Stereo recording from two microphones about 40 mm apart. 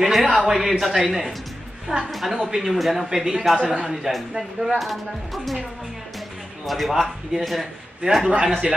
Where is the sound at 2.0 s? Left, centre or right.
Centre.